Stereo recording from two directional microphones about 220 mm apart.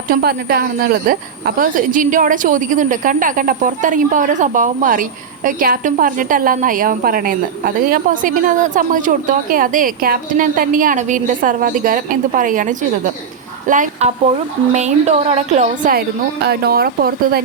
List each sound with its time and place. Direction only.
0.1 s speech: 45° right (ahead or behind)
13.7 s a woman's voice: 35° right (ahead or behind)